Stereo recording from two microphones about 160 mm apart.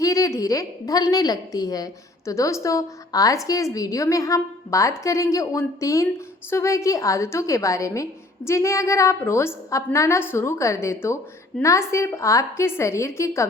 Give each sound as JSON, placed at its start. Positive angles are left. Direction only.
{"t": 0.0, "sound": "a woman's voice", "side_deg": 20}